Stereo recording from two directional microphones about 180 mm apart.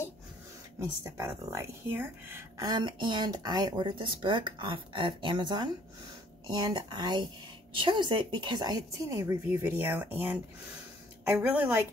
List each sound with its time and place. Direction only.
1.0 s a woman's voice: 15° right (ahead or behind)